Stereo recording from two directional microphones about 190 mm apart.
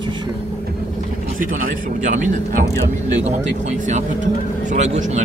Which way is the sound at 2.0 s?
40° right (ahead or behind).